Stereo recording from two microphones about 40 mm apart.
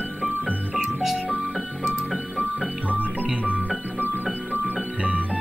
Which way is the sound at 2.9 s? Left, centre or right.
Right.